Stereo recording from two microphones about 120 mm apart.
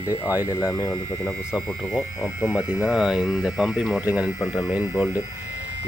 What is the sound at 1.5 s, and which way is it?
Speech, centre (ahead or behind).